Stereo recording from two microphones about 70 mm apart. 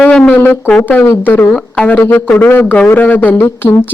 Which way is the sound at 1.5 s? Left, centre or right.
Left.